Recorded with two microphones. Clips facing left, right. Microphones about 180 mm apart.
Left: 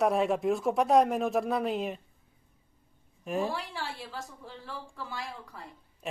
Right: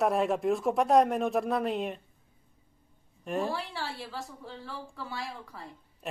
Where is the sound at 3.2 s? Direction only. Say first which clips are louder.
Even; centre (ahead or behind).